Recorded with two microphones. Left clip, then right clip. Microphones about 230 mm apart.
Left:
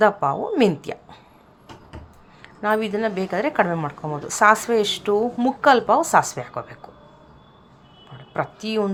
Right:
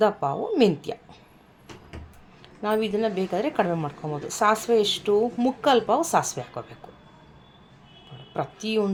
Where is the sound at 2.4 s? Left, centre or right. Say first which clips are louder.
Left 4 dB; centre.